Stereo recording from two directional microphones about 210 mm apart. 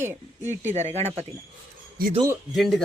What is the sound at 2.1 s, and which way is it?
Speech, 15° right (ahead or behind).